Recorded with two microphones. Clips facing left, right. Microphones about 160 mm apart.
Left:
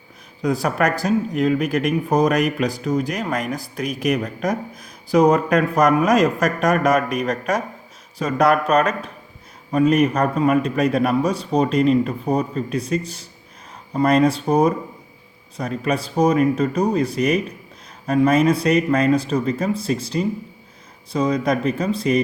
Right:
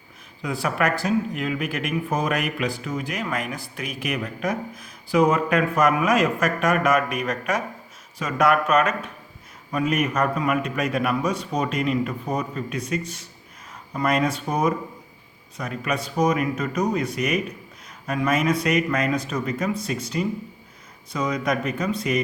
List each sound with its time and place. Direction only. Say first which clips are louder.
0.4 s speech: left 4 dB; 40° left (ahead or behind)